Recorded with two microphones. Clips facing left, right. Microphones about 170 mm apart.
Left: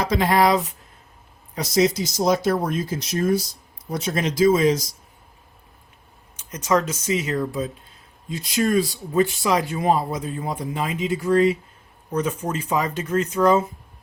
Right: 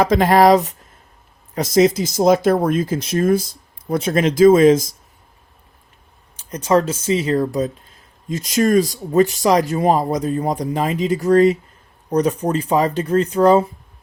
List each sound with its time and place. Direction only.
0.0 s speech: 50° right (ahead or behind)
6.3 s speech: 30° right (ahead or behind)